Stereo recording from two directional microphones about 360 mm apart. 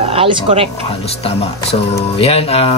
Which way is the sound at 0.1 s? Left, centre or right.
Centre.